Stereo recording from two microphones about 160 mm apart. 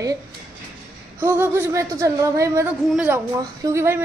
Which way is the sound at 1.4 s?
15° right (ahead or behind).